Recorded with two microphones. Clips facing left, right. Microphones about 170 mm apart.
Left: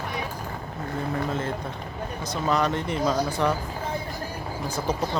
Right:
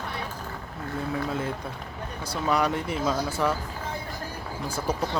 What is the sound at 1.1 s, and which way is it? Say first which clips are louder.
Speech: left 1 dB; 10° right (ahead or behind).